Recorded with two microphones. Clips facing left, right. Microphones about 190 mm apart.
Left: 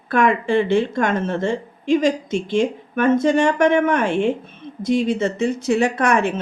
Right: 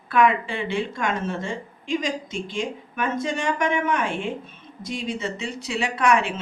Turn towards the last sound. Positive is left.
turn(degrees=45)  # may be behind; listen again after turning